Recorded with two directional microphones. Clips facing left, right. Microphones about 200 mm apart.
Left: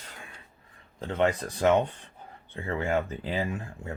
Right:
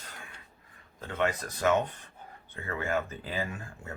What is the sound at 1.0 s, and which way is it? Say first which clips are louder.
Speech: left 4 dB; 30° left (ahead or behind).